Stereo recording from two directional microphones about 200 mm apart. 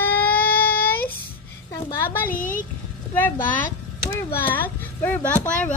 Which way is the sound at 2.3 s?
40° left (ahead or behind).